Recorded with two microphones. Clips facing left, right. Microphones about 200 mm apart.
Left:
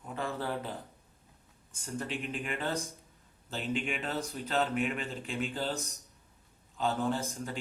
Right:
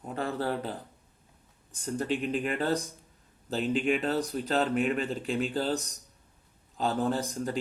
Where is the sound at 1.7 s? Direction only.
35° right (ahead or behind).